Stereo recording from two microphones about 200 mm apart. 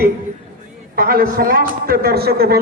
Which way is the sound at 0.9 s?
45° right (ahead or behind).